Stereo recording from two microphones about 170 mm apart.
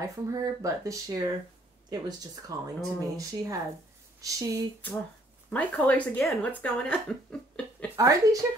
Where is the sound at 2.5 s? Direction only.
20° right (ahead or behind).